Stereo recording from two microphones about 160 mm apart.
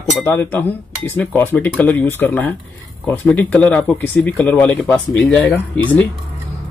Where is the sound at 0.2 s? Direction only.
10° left (ahead or behind).